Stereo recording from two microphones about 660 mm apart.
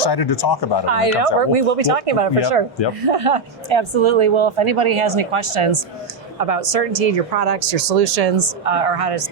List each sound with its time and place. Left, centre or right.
0.0 s speech: left
0.9 s speech: right
6.4 s speech: right